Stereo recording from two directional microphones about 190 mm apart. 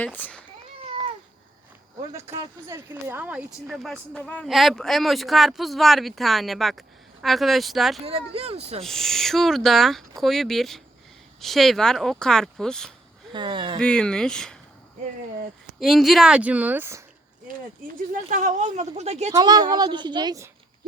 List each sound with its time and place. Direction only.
0.0 s speech: 10° left (ahead or behind)
2.2 s a woman's voice: 30° right (ahead or behind)
2.6 s speech: 15° right (ahead or behind)
8.0 s speech: 30° right (ahead or behind)
8.8 s speech: centre (ahead or behind)
13.3 s a woman's voice: 25° right (ahead or behind)
13.7 s speech: 5° left (ahead or behind)
15.8 s speech: centre (ahead or behind)
18.1 s speech: 45° right (ahead or behind)
19.3 s a woman's voice: 20° right (ahead or behind)